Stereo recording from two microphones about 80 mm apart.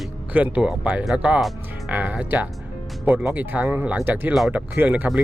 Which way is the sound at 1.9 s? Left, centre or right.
Right.